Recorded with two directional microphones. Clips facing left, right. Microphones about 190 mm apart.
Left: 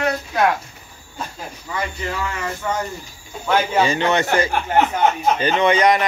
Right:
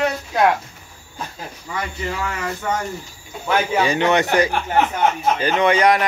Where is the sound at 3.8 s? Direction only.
15° right (ahead or behind).